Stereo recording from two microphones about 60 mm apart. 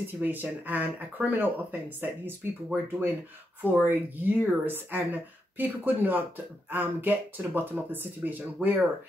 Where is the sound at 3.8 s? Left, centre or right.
Right.